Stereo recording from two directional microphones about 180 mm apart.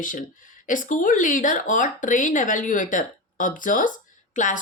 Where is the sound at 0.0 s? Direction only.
45° left (ahead or behind).